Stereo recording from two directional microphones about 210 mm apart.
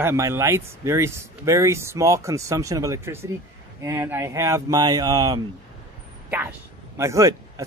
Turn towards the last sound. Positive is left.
turn(degrees=-15)  # may be behind; listen again after turning